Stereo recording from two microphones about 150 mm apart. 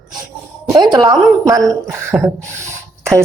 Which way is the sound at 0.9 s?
25° right (ahead or behind).